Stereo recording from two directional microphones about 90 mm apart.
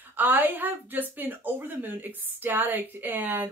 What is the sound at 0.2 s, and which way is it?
Speech, 20° right (ahead or behind).